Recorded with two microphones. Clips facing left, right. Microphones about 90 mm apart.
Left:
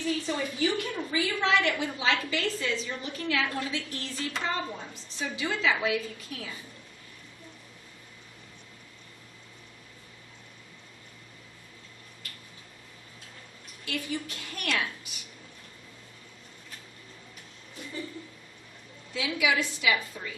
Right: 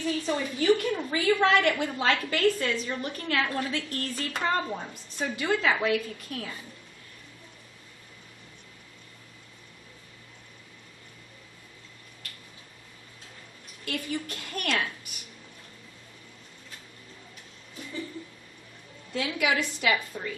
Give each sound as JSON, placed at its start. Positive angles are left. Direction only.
{"t": 0.6, "sound": "a woman's voice", "side_deg": -50}
{"t": 13.8, "sound": "a woman's voice", "side_deg": -50}
{"t": 19.1, "sound": "a woman's voice", "side_deg": -50}